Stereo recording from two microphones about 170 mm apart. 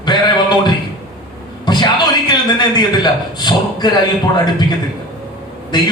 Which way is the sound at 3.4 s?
25° left (ahead or behind).